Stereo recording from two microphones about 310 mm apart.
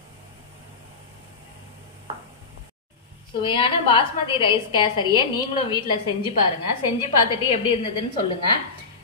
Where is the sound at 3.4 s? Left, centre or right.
Centre.